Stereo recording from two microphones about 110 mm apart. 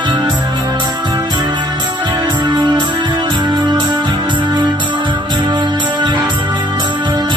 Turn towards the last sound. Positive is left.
turn(degrees=-45)  # may be behind; listen again after turning